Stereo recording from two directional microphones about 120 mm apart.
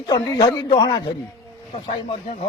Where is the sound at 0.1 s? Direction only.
30° left (ahead or behind).